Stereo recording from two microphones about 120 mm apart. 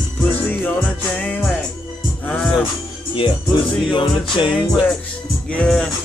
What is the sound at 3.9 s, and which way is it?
Music, 45° left (ahead or behind).